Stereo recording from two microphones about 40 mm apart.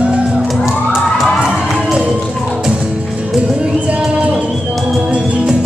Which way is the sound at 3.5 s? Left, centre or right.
Right.